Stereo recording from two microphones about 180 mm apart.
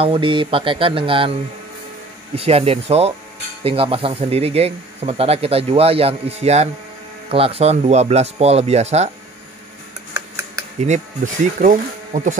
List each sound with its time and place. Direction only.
0.0 s speech: 30° right (ahead or behind)
2.3 s speech: 35° right (ahead or behind)
10.8 s speech: 40° right (ahead or behind)